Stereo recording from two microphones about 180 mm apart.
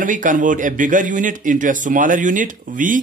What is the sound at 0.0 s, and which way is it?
Speech, 45° right (ahead or behind).